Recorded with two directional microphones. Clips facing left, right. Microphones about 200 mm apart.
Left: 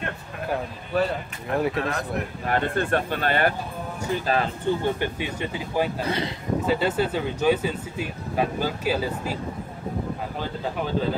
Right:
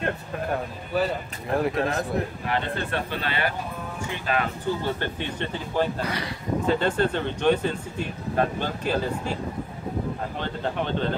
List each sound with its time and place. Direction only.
0.5 s speech: centre (ahead or behind)
2.4 s speech: 50° left (ahead or behind)
4.1 s speech: 35° left (ahead or behind)
4.8 s speech: 15° left (ahead or behind)
6.0 s speech: 25° left (ahead or behind)
6.6 s speech: 5° left (ahead or behind)
10.4 s speech: 5° left (ahead or behind)